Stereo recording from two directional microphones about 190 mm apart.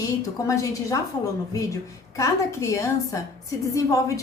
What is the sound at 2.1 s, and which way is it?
A woman's voice, 15° left (ahead or behind).